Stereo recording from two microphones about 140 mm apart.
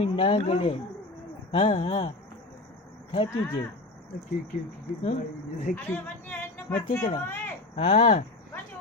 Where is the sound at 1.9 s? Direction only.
40° left (ahead or behind).